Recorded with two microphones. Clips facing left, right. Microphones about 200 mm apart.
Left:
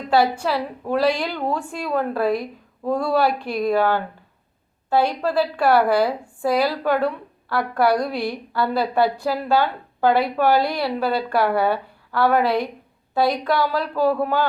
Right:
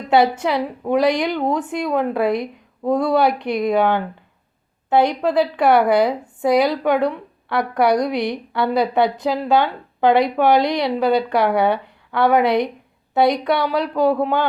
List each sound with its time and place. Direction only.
0.1 s a woman's voice: 20° right (ahead or behind)